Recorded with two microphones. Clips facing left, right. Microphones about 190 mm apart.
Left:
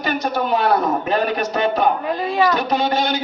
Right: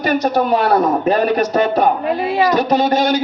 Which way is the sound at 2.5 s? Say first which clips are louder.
Right 5 dB; 40° right (ahead or behind).